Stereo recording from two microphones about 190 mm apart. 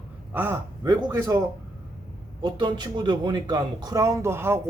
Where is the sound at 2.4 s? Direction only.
25° right (ahead or behind).